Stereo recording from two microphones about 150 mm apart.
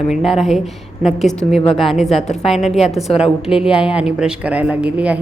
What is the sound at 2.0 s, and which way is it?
Speech, 50° left (ahead or behind).